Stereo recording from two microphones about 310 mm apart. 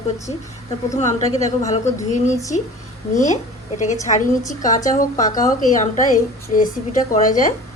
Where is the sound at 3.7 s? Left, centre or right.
Left.